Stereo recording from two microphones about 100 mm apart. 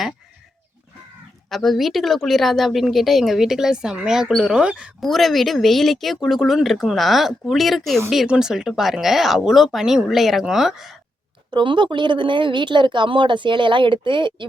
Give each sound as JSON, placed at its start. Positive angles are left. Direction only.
{"t": 1.5, "sound": "speech", "side_deg": 0}
{"t": 4.9, "sound": "speech", "side_deg": 0}
{"t": 11.5, "sound": "speech", "side_deg": -55}